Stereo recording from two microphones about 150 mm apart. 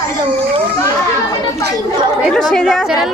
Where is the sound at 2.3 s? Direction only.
5° left (ahead or behind).